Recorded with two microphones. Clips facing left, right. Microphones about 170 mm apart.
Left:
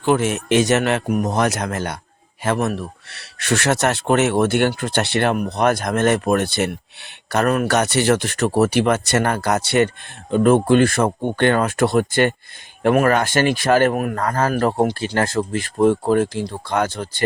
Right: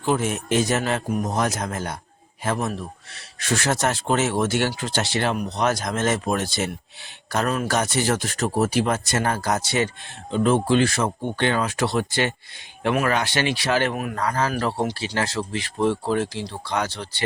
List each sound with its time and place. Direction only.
0.0 s speech: 75° left (ahead or behind); by 17.2 s 45° left (ahead or behind)